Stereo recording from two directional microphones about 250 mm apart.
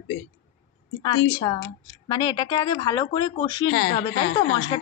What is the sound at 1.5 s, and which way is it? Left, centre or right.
Speech, centre.